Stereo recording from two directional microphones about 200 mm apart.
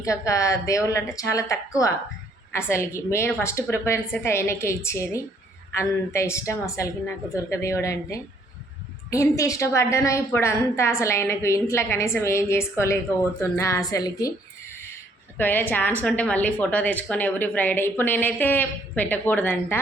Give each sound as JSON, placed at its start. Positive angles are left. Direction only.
{"t": 0.0, "sound": "a woman's voice", "side_deg": 15}